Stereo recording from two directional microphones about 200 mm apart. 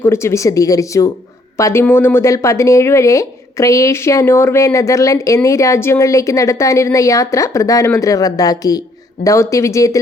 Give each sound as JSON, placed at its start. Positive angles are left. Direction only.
{"t": 0.0, "sound": "speech", "side_deg": 15}